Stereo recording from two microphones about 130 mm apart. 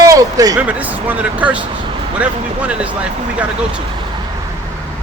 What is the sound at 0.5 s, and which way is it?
Speech, 10° right (ahead or behind).